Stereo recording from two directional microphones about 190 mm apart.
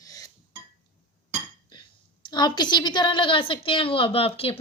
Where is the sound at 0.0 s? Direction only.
20° left (ahead or behind).